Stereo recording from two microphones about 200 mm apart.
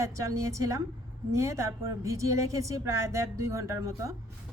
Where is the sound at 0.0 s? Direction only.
15° right (ahead or behind).